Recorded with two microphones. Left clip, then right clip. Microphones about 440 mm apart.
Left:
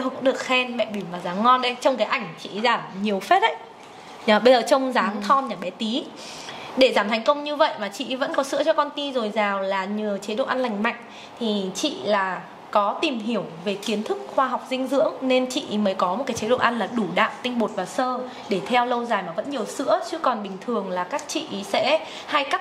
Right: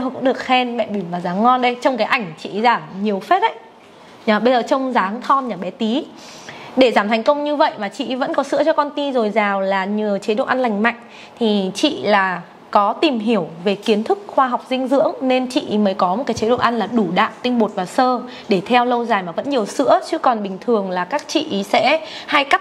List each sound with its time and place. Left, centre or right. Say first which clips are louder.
0.2 s a woman's voice: right 5 dB; right